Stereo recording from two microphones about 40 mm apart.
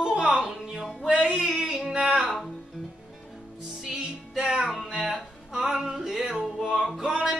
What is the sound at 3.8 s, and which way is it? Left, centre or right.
Music, centre.